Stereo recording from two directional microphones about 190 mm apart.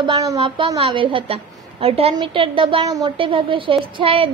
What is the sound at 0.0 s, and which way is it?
A woman's voice, 20° right (ahead or behind).